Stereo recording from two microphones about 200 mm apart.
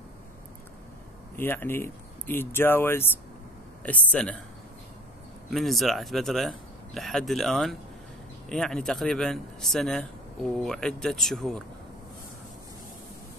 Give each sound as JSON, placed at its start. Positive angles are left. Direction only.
{"t": 1.4, "sound": "speech", "side_deg": 10}
{"t": 5.5, "sound": "speech", "side_deg": 0}